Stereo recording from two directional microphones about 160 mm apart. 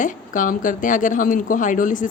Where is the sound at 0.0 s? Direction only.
55° left (ahead or behind).